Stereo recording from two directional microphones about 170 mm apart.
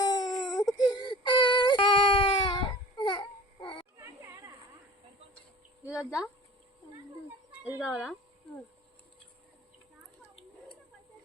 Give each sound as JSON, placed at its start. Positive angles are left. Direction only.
{"t": 0.0, "sound": "baby cry", "side_deg": 20}
{"t": 4.0, "sound": "children playing", "side_deg": -15}
{"t": 5.9, "sound": "speech", "side_deg": -5}
{"t": 7.6, "sound": "chicken", "side_deg": -5}